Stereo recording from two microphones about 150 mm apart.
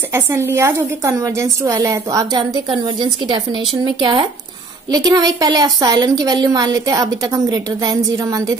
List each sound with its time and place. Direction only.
0.1 s a woman's voice: 15° right (ahead or behind)